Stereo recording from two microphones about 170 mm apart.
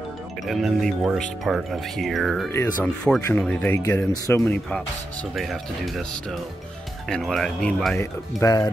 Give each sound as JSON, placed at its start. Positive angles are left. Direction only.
{"t": 0.5, "sound": "speech", "side_deg": 0}
{"t": 2.5, "sound": "speech", "side_deg": 10}
{"t": 7.1, "sound": "speech", "side_deg": 5}
{"t": 8.4, "sound": "speech", "side_deg": 20}